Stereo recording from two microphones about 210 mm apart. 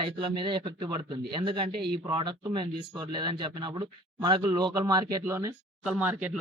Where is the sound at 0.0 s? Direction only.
25° right (ahead or behind).